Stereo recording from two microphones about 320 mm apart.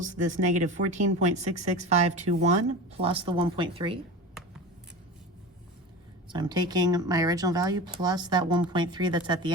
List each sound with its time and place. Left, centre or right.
0.0 s speech: right
6.2 s speech: centre